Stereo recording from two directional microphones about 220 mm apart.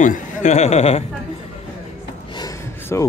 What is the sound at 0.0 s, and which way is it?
Speech, 35° left (ahead or behind).